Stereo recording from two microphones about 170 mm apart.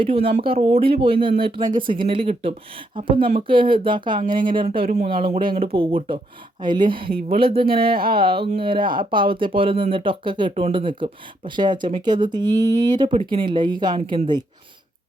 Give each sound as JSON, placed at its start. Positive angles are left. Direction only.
{"t": 0.0, "sound": "speech", "side_deg": -35}
{"t": 7.9, "sound": "speech", "side_deg": -60}
{"t": 8.2, "sound": "speech", "side_deg": -30}